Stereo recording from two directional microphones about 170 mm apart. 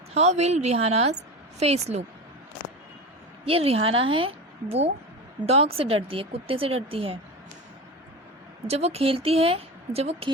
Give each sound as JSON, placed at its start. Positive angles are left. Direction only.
{"t": 0.1, "sound": "speech", "side_deg": -40}
{"t": 3.4, "sound": "speech", "side_deg": -35}
{"t": 8.6, "sound": "speech", "side_deg": -40}